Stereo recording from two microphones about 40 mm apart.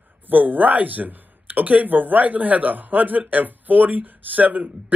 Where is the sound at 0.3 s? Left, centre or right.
Right.